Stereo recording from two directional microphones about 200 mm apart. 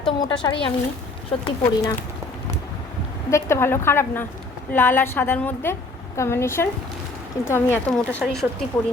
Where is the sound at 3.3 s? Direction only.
15° left (ahead or behind).